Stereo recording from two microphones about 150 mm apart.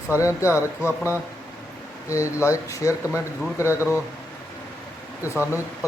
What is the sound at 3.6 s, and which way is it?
Speech, 20° left (ahead or behind).